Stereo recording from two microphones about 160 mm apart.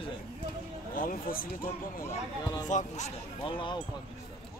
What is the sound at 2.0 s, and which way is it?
Speech, 25° left (ahead or behind).